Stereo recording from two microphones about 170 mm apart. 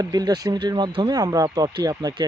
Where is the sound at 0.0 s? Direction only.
20° right (ahead or behind).